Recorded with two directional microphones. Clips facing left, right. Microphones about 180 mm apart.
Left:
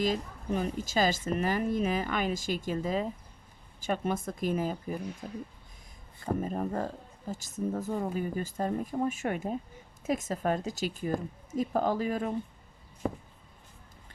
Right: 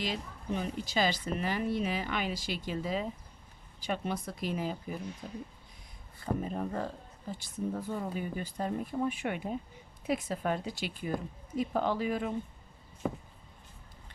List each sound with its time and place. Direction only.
0.0 s a woman's voice: 45° left (ahead or behind)
6.4 s a woman's voice: 45° left (ahead or behind)
13.0 s a sound: centre (ahead or behind)